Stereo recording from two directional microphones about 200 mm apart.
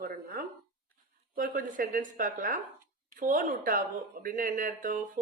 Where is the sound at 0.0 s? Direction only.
45° right (ahead or behind).